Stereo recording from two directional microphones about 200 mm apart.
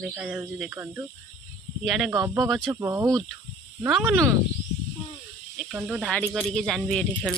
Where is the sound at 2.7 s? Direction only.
15° right (ahead or behind).